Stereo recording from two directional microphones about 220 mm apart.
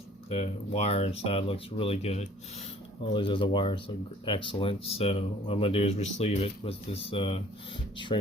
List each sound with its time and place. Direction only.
0.3 s speech: 30° left (ahead or behind)